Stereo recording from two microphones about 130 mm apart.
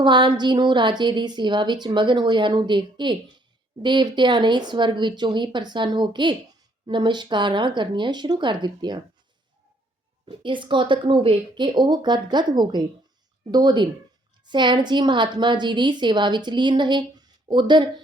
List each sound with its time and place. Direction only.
0.0 s a woman's voice: 35° right (ahead or behind)
10.2 s a woman's voice: 40° right (ahead or behind)